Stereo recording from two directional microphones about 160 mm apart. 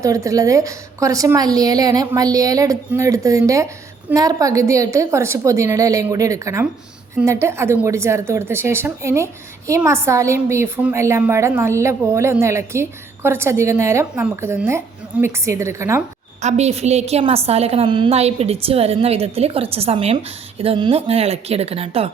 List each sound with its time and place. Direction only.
0.0 s a woman's voice: 20° right (ahead or behind)
16.4 s a woman's voice: 45° right (ahead or behind)